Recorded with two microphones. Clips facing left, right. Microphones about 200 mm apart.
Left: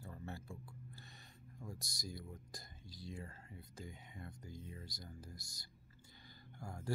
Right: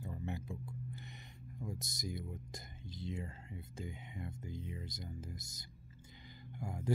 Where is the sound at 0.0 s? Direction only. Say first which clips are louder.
Right 6 dB; 20° right (ahead or behind).